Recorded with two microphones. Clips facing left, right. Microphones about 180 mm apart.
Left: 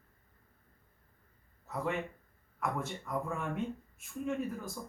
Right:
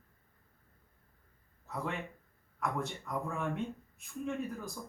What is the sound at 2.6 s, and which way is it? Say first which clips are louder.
Speech: even; 5° left (ahead or behind).